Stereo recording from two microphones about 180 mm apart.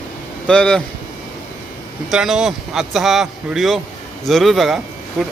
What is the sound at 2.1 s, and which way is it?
Speech, 5° right (ahead or behind).